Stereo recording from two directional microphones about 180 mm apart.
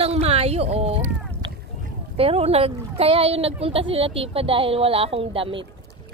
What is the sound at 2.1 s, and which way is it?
Speech, 35° right (ahead or behind).